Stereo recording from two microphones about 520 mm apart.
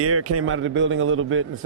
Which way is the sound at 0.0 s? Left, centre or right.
Right.